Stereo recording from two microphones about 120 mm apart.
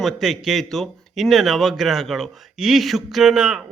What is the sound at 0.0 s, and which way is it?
A man's voice, centre (ahead or behind).